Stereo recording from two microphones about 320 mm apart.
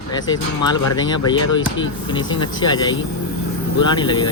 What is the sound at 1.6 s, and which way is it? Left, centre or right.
Speech, left.